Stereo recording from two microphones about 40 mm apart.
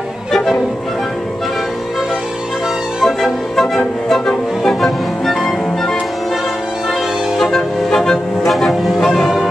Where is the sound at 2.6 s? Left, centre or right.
Centre.